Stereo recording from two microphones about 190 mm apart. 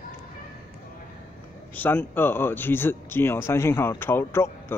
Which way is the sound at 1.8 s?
10° left (ahead or behind).